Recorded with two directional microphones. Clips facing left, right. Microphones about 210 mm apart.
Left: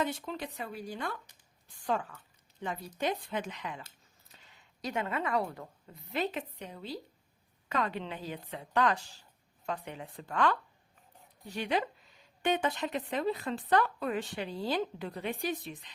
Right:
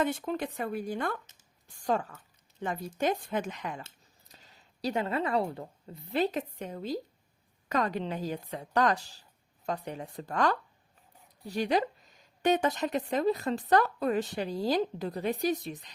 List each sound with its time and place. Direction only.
0.0 s speech: 50° right (ahead or behind)
1.6 s a woman's voice: 40° right (ahead or behind)